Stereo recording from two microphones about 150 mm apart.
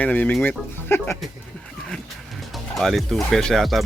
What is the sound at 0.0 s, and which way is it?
Speech, 10° left (ahead or behind).